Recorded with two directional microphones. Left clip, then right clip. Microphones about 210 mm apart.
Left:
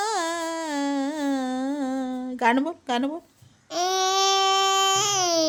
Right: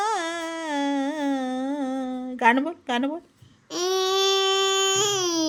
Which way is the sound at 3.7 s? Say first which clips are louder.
Left 1 dB; 5° left (ahead or behind).